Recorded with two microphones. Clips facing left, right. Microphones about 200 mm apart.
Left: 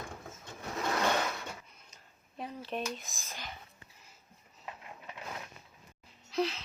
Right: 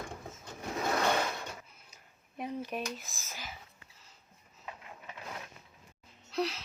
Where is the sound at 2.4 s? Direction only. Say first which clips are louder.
Right 4 dB; 15° right (ahead or behind).